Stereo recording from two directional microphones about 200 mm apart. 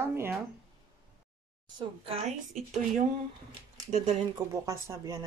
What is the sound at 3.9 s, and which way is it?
Speech, 35° right (ahead or behind).